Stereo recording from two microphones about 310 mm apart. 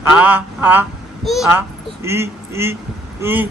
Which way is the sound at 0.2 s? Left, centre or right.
Centre.